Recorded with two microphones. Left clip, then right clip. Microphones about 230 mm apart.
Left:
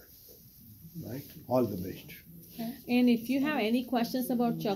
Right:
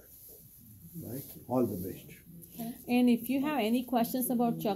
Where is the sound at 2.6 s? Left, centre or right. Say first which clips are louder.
Left 1 dB; centre.